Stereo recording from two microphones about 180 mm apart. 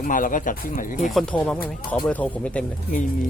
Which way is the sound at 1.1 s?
5° left (ahead or behind).